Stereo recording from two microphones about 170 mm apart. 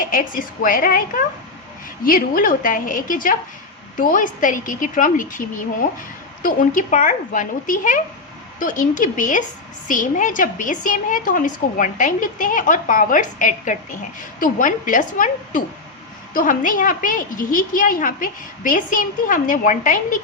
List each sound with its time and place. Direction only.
0.0 s a woman's voice: 55° left (ahead or behind)
6.4 s a woman's voice: 50° left (ahead or behind)